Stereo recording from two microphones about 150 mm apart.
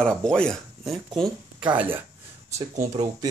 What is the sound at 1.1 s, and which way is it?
Speech, 30° right (ahead or behind).